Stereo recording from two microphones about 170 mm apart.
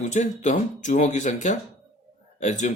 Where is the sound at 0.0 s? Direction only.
45° left (ahead or behind).